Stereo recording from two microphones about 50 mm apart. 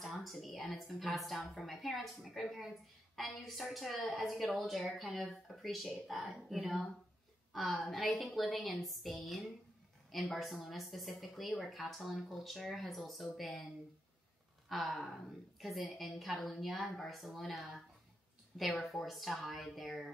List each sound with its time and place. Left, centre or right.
0.0 s a sound: centre
0.6 s speech: centre
7.5 s speech: centre
14.7 s speech: centre